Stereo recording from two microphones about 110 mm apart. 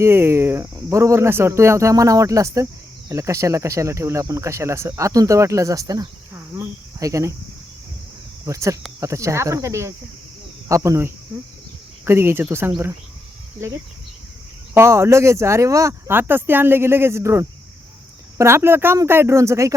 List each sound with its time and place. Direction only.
0.0 s speech: 25° right (ahead or behind)
6.3 s speech: 20° right (ahead or behind)
8.4 s speech: 30° right (ahead or behind)
14.7 s speech: 25° right (ahead or behind)